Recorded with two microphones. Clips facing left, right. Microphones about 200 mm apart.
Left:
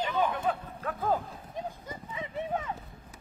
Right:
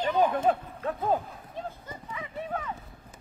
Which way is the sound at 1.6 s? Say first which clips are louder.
Even; 15° left (ahead or behind).